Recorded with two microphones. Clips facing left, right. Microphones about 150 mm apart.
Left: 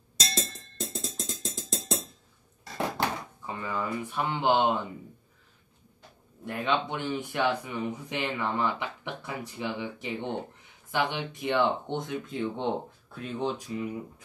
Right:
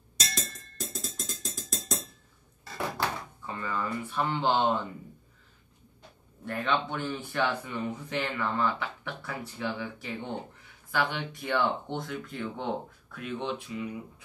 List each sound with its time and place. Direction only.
0.2 s music: 25° left (ahead or behind)
3.4 s speech: 15° left (ahead or behind)
6.4 s speech: 15° left (ahead or behind); by 13.8 s 35° left (ahead or behind)